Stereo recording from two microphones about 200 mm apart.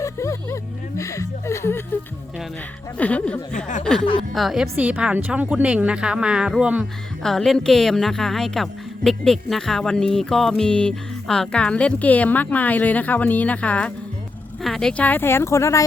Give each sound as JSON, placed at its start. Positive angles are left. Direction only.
{"t": 0.0, "sound": "chuckle", "side_deg": 15}
{"t": 3.0, "sound": "speech", "side_deg": 5}